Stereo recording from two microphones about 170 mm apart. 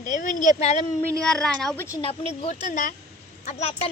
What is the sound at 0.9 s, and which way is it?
Speech, 5° left (ahead or behind).